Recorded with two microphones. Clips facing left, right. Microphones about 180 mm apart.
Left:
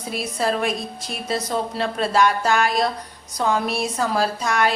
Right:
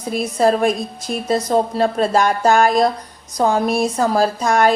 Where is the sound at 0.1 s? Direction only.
45° right (ahead or behind).